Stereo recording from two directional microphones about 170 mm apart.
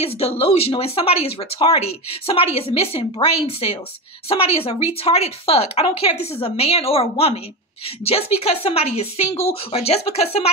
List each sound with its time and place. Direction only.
0.0 s speech: 35° left (ahead or behind)